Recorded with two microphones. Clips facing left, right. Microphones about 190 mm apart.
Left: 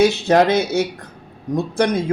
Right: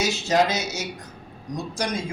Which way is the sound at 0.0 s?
60° left (ahead or behind).